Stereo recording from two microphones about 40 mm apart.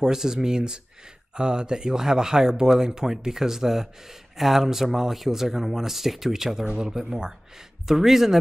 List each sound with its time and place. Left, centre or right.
0.0 s speech: centre